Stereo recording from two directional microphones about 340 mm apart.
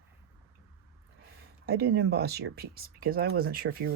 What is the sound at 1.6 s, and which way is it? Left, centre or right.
Speech, right.